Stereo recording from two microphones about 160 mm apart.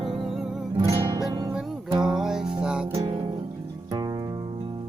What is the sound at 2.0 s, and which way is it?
Music, 5° right (ahead or behind).